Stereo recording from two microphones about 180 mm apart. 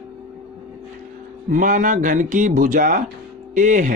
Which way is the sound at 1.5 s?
45° right (ahead or behind).